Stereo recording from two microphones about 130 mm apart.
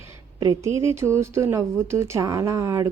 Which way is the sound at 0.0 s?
25° right (ahead or behind).